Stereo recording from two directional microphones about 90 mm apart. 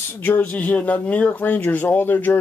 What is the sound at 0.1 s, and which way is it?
Speech, 20° left (ahead or behind).